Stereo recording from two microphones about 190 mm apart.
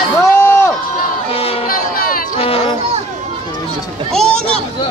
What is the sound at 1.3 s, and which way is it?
Crowd, 30° left (ahead or behind).